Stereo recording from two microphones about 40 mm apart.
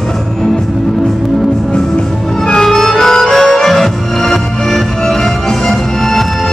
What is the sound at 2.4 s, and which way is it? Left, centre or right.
Music, centre.